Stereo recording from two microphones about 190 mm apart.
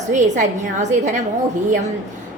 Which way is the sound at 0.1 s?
40° right (ahead or behind).